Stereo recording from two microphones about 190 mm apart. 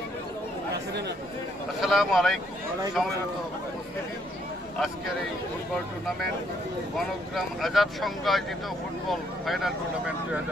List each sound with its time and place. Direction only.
1.8 s speech: centre (ahead or behind)
7.0 s speech: centre (ahead or behind)